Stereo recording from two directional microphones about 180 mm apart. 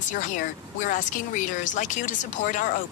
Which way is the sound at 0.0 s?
45° left (ahead or behind).